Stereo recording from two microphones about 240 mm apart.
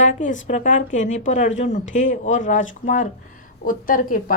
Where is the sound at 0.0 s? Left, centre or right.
Left.